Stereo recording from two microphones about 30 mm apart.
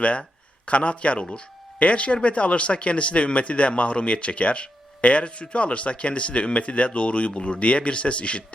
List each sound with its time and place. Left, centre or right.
0.6 s a man's voice: left